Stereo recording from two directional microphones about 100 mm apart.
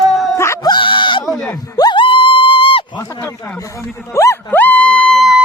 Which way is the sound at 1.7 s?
45° left (ahead or behind).